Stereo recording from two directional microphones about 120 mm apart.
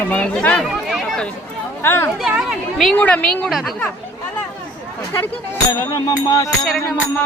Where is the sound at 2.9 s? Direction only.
10° left (ahead or behind).